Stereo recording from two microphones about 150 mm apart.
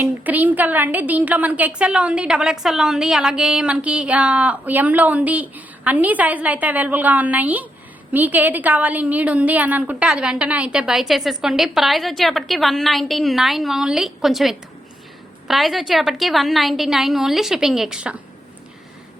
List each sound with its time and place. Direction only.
0.0 s a woman's voice: 10° right (ahead or behind)